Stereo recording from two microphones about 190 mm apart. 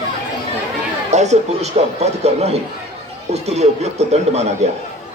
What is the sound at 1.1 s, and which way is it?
A man's voice, 35° right (ahead or behind).